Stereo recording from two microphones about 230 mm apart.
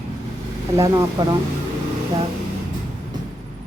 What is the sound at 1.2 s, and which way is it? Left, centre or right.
Speech, centre.